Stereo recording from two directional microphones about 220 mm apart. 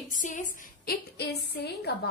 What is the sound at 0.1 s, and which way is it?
A woman's voice, 35° left (ahead or behind).